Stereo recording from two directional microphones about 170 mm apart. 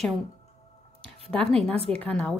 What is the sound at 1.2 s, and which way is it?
A woman's voice, centre (ahead or behind).